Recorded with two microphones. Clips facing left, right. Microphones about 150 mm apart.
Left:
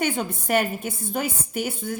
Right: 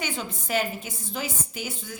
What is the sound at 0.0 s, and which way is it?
A woman's voice, 55° left (ahead or behind).